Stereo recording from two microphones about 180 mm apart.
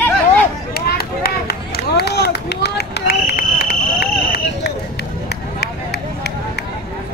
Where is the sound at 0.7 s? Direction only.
60° left (ahead or behind).